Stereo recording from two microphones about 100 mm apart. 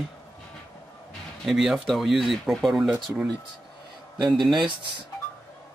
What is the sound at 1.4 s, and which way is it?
Speech, 5° right (ahead or behind).